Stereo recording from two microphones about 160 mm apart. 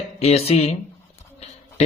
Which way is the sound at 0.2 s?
40° left (ahead or behind).